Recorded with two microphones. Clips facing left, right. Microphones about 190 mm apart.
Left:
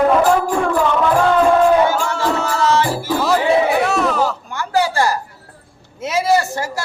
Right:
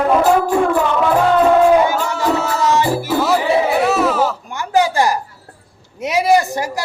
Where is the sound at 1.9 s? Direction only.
15° right (ahead or behind).